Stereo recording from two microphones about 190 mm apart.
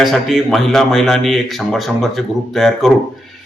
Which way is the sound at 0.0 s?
Centre (ahead or behind).